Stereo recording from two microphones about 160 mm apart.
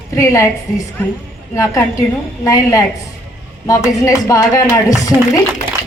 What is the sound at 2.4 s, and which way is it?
Speech, 20° left (ahead or behind).